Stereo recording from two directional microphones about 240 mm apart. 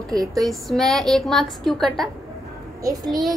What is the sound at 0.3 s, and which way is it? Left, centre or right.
Music, centre.